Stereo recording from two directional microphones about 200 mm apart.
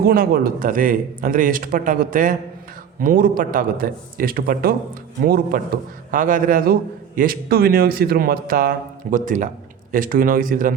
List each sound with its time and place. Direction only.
0.0 s a man's voice: 50° right (ahead or behind)